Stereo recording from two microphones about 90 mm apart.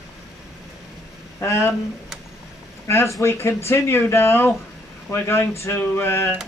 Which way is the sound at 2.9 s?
30° left (ahead or behind).